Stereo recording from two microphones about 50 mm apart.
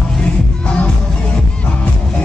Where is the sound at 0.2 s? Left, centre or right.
Left.